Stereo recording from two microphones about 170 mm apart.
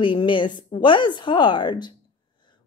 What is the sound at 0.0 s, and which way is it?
A woman's voice, 30° left (ahead or behind).